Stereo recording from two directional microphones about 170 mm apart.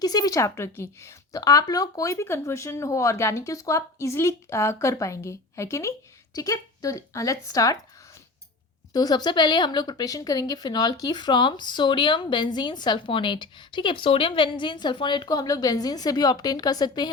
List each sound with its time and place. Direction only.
0.0 s speech: 25° left (ahead or behind)
8.9 s speech: 25° left (ahead or behind)